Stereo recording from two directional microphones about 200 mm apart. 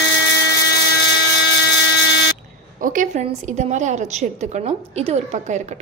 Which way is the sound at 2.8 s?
40° right (ahead or behind).